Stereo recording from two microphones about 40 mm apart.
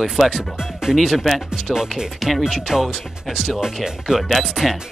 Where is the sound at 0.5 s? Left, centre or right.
Centre.